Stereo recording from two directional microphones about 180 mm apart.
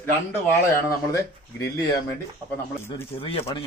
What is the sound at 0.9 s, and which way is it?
Speech, 15° left (ahead or behind).